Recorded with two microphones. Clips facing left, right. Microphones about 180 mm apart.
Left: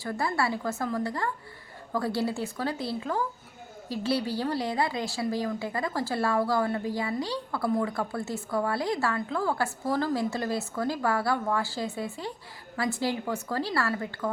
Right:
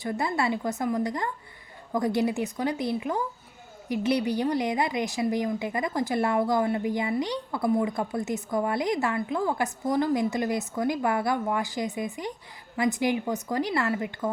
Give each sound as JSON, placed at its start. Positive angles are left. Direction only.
{"t": 0.0, "sound": "a woman's voice", "side_deg": -20}